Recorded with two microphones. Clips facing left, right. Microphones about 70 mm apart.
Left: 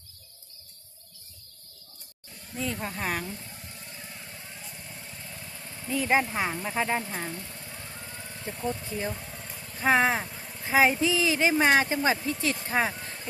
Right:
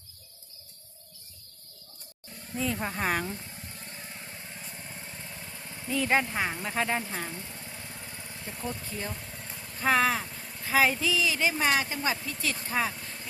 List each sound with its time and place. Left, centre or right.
2.7 s speech: centre
5.5 s vehicle: centre
6.0 s speech: centre
7.0 s speech: centre
7.3 s vehicle: right
8.1 s vehicle: centre
8.4 s speech: centre
9.7 s speech: centre
10.2 s a sound: centre
10.6 s speech: left
12.1 s speech: centre
12.4 s speech: left